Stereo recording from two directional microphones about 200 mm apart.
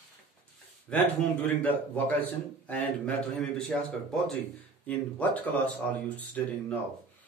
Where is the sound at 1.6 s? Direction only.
10° left (ahead or behind).